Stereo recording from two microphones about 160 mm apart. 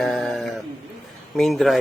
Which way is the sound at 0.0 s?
Centre (ahead or behind).